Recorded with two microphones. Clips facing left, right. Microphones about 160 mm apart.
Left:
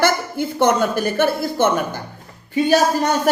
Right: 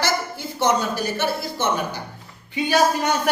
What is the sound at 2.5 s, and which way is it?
Speech, 40° left (ahead or behind).